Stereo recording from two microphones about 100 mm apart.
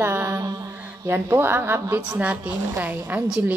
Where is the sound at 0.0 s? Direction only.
25° right (ahead or behind).